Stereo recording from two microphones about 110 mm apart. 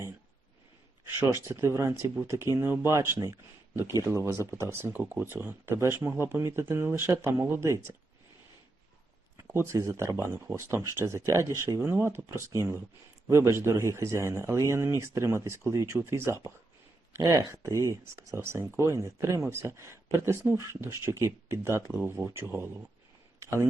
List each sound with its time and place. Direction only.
1.0 s speech: 20° right (ahead or behind)
9.4 s speech: 25° right (ahead or behind)
23.4 s a sound: 25° right (ahead or behind)